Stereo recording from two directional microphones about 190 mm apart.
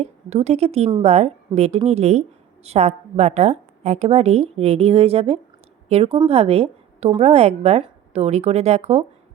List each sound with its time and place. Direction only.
0.0 s a woman's voice: 35° right (ahead or behind)